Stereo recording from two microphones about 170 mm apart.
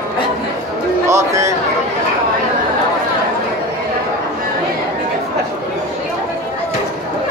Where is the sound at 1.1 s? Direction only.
15° right (ahead or behind).